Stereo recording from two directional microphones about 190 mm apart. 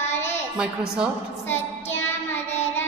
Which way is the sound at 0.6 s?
5° right (ahead or behind).